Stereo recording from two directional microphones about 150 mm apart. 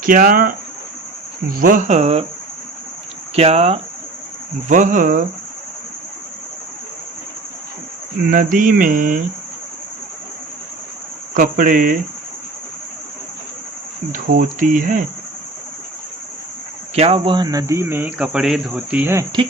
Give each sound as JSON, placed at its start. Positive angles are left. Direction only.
{"t": 0.0, "sound": "speech", "side_deg": -65}
{"t": 3.3, "sound": "speech", "side_deg": -45}
{"t": 4.7, "sound": "speech", "side_deg": -55}
{"t": 8.3, "sound": "speech", "side_deg": -65}
{"t": 11.3, "sound": "speech", "side_deg": -65}
{"t": 14.1, "sound": "speech", "side_deg": -60}
{"t": 16.9, "sound": "speech", "side_deg": -40}